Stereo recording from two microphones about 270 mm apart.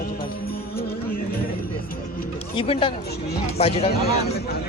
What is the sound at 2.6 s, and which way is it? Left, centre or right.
Speech, centre.